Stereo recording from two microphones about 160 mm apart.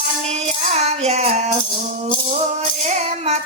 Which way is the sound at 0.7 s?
40° right (ahead or behind).